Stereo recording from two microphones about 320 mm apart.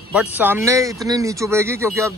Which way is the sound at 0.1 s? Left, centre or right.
Centre.